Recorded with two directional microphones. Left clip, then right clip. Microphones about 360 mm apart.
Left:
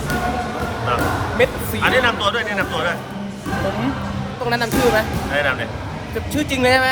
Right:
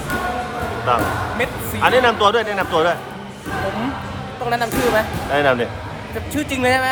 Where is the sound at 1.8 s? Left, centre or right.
Centre.